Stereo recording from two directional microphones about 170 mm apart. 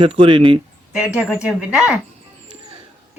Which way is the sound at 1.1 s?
5° right (ahead or behind).